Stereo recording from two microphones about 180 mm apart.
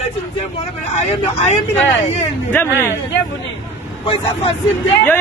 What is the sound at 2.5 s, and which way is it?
Speech, 10° left (ahead or behind).